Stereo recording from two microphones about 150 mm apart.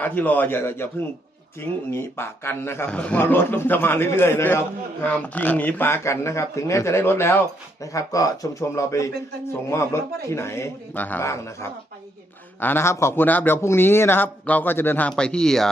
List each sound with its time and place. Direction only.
0.0 s speech: 10° left (ahead or behind)
1.9 s speech: 15° left (ahead or behind)